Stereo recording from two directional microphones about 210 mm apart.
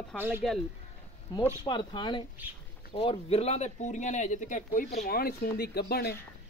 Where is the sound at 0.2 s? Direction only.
10° right (ahead or behind).